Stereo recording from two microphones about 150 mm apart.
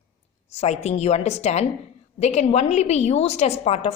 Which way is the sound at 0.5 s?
45° left (ahead or behind).